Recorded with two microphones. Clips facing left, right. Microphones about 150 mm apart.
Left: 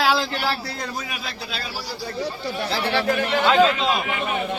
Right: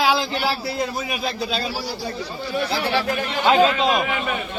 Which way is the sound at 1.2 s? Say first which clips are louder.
Right 8 dB; 20° right (ahead or behind).